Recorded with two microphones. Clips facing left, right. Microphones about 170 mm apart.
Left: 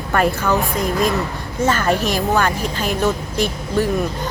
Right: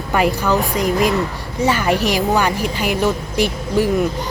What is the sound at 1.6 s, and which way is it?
Speech, 15° right (ahead or behind).